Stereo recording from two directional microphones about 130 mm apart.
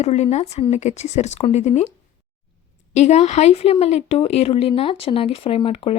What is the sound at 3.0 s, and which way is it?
A woman's voice, 60° left (ahead or behind).